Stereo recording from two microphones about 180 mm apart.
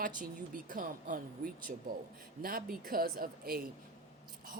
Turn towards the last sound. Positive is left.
turn(degrees=-55)  # may be behind; listen again after turning